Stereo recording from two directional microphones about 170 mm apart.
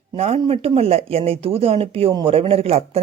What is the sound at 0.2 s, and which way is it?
Speech, 35° right (ahead or behind).